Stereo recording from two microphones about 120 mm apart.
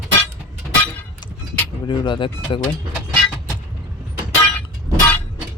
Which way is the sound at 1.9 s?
40° left (ahead or behind).